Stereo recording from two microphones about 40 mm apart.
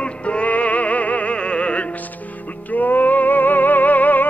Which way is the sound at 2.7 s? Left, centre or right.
Left.